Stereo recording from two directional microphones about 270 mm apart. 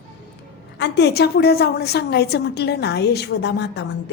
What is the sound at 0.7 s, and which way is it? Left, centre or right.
A woman's voice, left.